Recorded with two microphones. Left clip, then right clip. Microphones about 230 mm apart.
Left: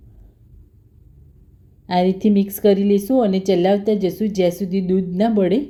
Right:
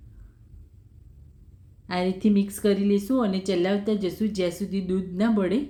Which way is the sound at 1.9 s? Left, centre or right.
Centre.